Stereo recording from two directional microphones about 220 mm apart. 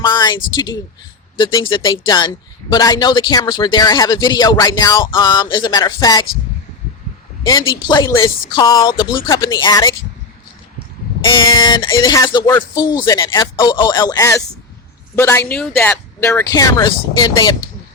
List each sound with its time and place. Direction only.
0.0 s speech: 20° left (ahead or behind)
7.7 s speech: 20° left (ahead or behind)
11.2 s speech: 20° left (ahead or behind)